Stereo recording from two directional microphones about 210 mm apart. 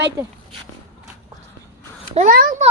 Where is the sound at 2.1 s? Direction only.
40° right (ahead or behind).